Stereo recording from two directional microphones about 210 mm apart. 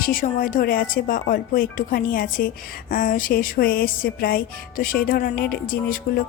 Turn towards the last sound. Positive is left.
turn(degrees=45)  # may be behind; listen again after turning